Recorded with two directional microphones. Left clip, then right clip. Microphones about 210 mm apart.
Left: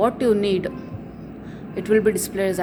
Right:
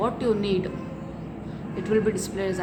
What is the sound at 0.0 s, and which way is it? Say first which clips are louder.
Speech: left 6 dB; 30° left (ahead or behind).